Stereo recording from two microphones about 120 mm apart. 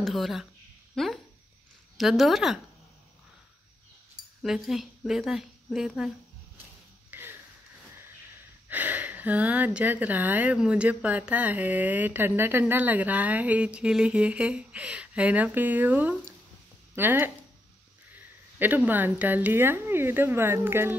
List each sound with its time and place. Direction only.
0.0 s speech: centre (ahead or behind)
4.4 s speech: centre (ahead or behind)
7.1 s a sound: 15° right (ahead or behind)
8.6 s speech: 15° right (ahead or behind)